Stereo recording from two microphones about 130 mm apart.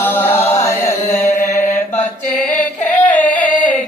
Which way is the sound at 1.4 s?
70° left (ahead or behind).